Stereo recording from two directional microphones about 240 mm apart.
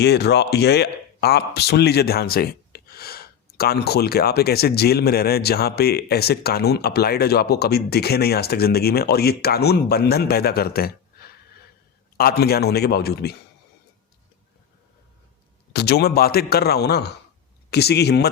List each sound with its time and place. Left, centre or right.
0.0 s speech: left
15.7 s speech: left